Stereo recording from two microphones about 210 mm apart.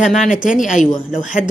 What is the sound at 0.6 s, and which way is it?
Speech, 35° left (ahead or behind).